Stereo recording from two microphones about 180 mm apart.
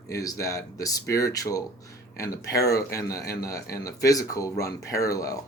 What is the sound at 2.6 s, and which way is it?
Speech, 15° left (ahead or behind).